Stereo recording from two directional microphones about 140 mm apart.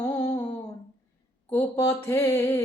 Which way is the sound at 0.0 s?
30° left (ahead or behind).